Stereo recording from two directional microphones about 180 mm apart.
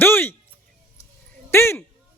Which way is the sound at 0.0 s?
10° left (ahead or behind).